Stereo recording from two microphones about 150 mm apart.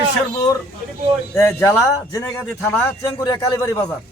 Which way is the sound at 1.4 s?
15° left (ahead or behind).